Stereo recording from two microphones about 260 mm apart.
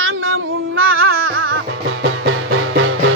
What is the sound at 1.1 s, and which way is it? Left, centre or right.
Music, right.